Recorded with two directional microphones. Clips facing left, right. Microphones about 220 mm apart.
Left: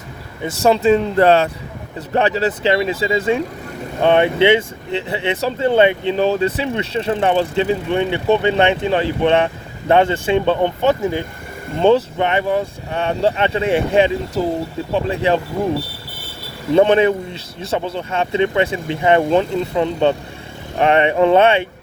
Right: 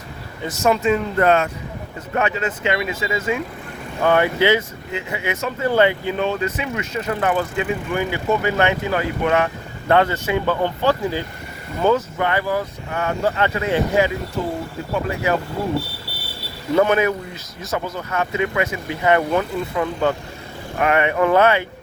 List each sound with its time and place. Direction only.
0.4 s speech: 30° left (ahead or behind)
16.7 s speech: 30° left (ahead or behind)